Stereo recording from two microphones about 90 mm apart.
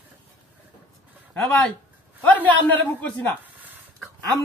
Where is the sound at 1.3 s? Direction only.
10° left (ahead or behind).